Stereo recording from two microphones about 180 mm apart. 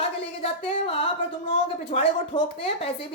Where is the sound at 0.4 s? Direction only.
30° left (ahead or behind).